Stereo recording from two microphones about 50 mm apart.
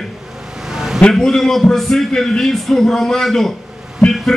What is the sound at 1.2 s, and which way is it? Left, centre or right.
A man's voice, centre.